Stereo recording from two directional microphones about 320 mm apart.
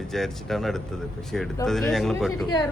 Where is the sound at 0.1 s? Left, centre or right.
Centre.